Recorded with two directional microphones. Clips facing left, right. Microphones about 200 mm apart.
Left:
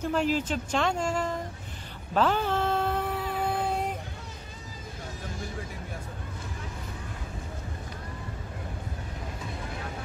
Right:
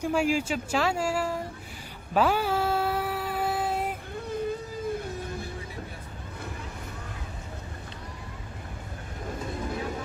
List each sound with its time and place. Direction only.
0.0 s speech: 10° right (ahead or behind)
2.1 s a sound: 10° right (ahead or behind)
4.3 s vehicle: 55° right (ahead or behind)